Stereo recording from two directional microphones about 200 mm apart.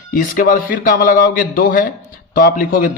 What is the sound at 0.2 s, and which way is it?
A man's voice, 45° left (ahead or behind).